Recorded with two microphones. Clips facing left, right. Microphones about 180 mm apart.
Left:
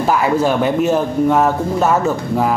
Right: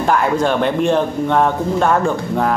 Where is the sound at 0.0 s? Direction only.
5° left (ahead or behind).